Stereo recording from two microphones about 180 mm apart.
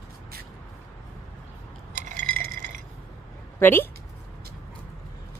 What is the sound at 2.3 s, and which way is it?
Chink, 50° right (ahead or behind).